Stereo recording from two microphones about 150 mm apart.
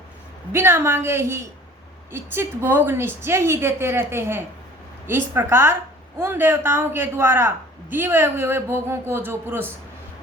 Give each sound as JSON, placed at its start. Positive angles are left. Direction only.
{"t": 0.5, "sound": "a man's voice", "side_deg": -15}